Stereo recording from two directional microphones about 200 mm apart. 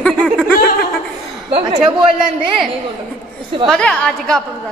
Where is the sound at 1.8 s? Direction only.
5° right (ahead or behind).